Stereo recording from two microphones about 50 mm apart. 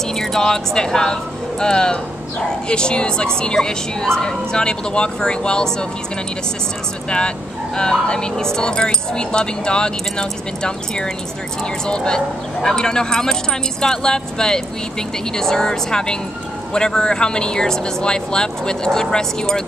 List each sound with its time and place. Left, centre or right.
0.1 s speech: centre
7.1 s speech: centre